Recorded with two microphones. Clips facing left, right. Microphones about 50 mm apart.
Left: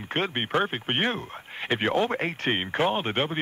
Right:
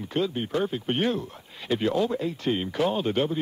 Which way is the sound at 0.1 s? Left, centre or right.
Left.